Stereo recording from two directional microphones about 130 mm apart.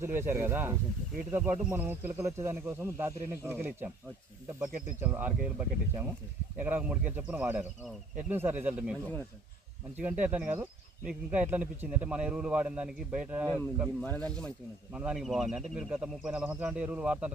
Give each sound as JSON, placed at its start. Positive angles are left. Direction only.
{"t": 0.0, "sound": "speech", "side_deg": -15}
{"t": 10.0, "sound": "speech", "side_deg": -10}
{"t": 14.0, "sound": "speech", "side_deg": 10}
{"t": 14.9, "sound": "speech", "side_deg": -5}